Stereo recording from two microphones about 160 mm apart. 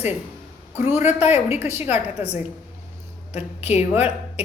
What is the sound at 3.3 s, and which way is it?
Speech, 40° left (ahead or behind).